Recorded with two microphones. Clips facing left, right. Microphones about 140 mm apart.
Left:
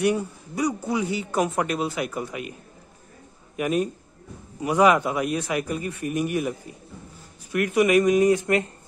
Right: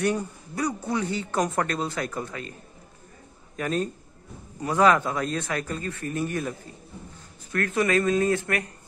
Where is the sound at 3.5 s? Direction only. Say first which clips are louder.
Left 3 dB; 10° left (ahead or behind).